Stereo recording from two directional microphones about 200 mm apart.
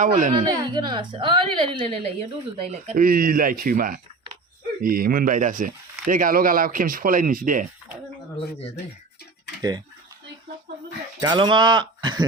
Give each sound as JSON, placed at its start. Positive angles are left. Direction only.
{"t": 0.0, "sound": "speech", "side_deg": -40}
{"t": 0.4, "sound": "a woman's voice", "side_deg": -20}
{"t": 8.4, "sound": "speech", "side_deg": 30}
{"t": 9.6, "sound": "speech", "side_deg": -20}
{"t": 11.2, "sound": "a woman's voice", "side_deg": -20}